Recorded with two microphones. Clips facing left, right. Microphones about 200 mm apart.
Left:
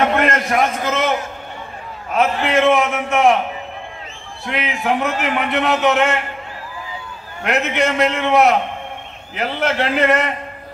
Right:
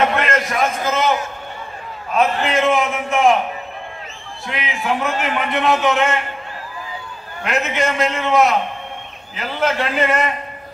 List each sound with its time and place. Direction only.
0.2 s a sound: 60° left (ahead or behind)
2.4 s a man's voice: 70° left (ahead or behind)
4.5 s a man's voice: 65° left (ahead or behind)
7.4 s a man's voice: 65° left (ahead or behind)
9.6 s a man's voice: 70° left (ahead or behind)